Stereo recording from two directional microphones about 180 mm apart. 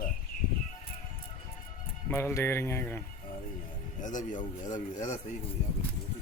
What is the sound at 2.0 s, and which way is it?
Speech, 15° left (ahead or behind).